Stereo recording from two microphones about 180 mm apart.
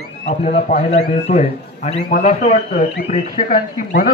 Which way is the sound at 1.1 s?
35° left (ahead or behind).